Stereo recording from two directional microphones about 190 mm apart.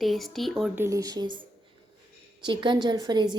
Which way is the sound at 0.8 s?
15° right (ahead or behind).